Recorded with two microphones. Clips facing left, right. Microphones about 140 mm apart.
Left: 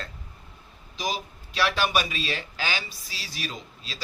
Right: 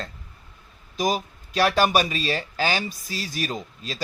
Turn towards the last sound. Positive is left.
turn(degrees=-45)  # may be behind; listen again after turning